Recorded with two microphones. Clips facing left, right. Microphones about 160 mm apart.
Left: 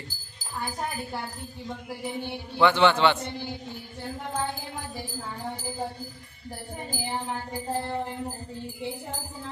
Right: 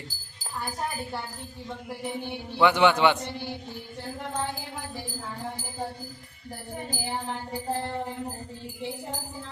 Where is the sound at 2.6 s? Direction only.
10° right (ahead or behind).